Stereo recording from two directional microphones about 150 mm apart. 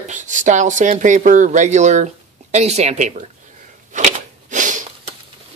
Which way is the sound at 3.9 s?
55° right (ahead or behind).